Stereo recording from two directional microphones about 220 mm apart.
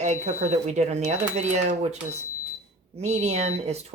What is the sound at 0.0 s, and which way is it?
Speech, 30° right (ahead or behind).